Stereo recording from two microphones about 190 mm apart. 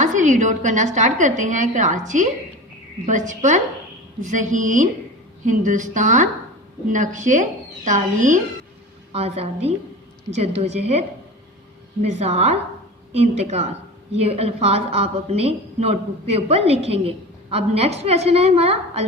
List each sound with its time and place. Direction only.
0.0 s a woman's voice: 40° right (ahead or behind)
12.0 s a woman's voice: 35° right (ahead or behind)